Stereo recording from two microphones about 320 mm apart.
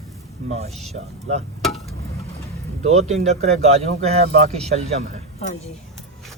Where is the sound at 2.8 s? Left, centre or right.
Right.